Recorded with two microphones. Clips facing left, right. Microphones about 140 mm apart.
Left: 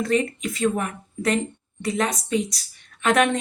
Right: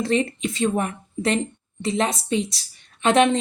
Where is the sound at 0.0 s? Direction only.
30° right (ahead or behind).